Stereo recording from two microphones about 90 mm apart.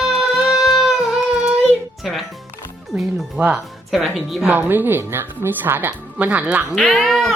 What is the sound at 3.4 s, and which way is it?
Speech, 20° right (ahead or behind).